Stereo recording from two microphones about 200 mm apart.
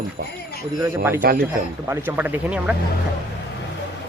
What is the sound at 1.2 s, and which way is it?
Speech, 45° right (ahead or behind).